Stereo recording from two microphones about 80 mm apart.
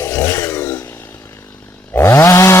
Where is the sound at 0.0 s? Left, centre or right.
Left.